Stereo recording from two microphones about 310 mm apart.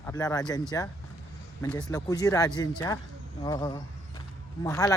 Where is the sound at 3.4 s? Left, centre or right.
Centre.